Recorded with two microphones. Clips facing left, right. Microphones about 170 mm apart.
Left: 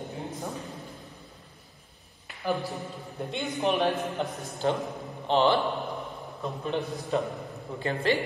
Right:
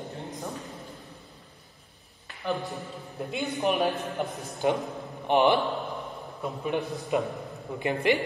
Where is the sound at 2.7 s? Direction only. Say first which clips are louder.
Left 1 dB; centre (ahead or behind).